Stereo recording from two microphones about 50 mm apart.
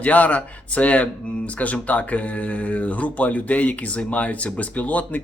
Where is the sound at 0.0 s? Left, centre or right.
Left.